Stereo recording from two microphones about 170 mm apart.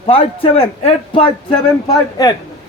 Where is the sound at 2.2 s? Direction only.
20° left (ahead or behind).